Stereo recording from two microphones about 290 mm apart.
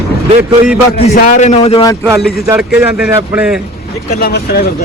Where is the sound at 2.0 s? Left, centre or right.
Centre.